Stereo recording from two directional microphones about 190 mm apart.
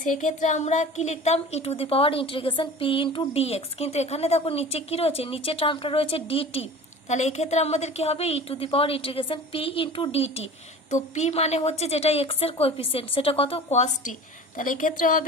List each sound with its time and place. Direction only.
0.0 s a woman's voice: 40° left (ahead or behind)